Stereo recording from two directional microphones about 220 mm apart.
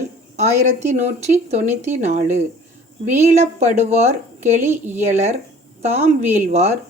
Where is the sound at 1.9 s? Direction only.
35° right (ahead or behind).